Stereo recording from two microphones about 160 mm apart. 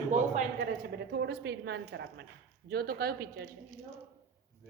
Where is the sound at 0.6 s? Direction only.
90° right.